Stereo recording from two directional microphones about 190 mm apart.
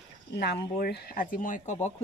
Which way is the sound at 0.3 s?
60° left (ahead or behind).